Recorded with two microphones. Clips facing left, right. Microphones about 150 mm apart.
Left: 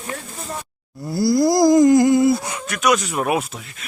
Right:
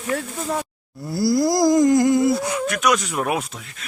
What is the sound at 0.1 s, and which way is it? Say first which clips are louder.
Speech: right 10 dB; 90° right.